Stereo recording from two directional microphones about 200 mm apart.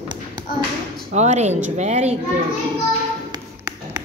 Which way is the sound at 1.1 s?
35° right (ahead or behind).